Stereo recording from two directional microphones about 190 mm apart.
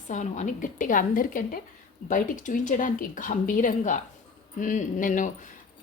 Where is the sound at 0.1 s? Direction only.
40° left (ahead or behind).